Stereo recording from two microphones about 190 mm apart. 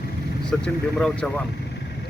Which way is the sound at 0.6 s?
5° left (ahead or behind).